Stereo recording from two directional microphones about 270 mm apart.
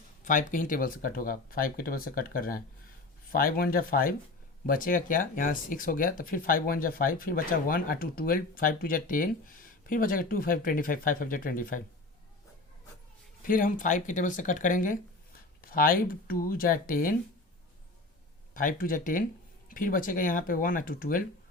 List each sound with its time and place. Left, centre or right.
0.3 s speech: left
13.4 s speech: left
18.5 s speech: left